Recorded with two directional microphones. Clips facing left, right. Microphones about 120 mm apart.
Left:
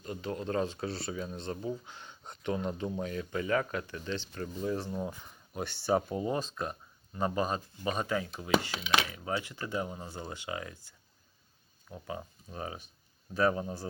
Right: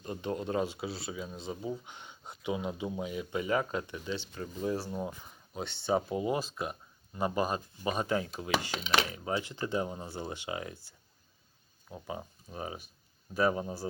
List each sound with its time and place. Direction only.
0.0 s speech: 25° right (ahead or behind); by 1.8 s 5° right (ahead or behind)
1.8 s speech: 20° right (ahead or behind)
2.2 s speech: 5° right (ahead or behind)
6.1 s speech: 10° right (ahead or behind)
11.9 s speech: 20° right (ahead or behind)